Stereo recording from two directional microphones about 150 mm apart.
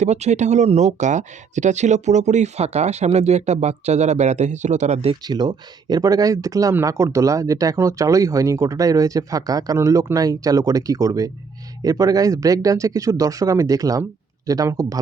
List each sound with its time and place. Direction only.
0.0 s speech: 50° right (ahead or behind)
5.2 s speech: 30° right (ahead or behind)